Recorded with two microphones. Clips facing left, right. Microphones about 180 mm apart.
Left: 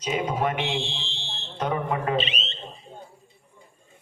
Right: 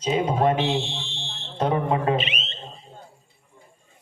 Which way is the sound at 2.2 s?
35° left (ahead or behind).